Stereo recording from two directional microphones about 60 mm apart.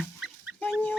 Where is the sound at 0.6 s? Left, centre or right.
Left.